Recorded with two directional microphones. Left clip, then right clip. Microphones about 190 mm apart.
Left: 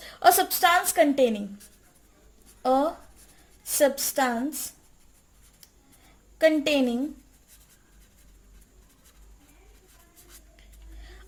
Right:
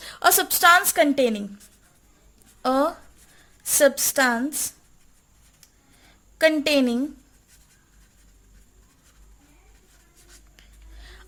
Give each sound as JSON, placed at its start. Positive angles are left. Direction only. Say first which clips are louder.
{"t": 0.0, "sound": "a woman's voice", "louder": "even", "side_deg": -35}
{"t": 2.6, "sound": "a woman's voice", "louder": "right 1 dB", "side_deg": -45}
{"t": 6.4, "sound": "a woman's voice", "louder": "right 2 dB", "side_deg": -40}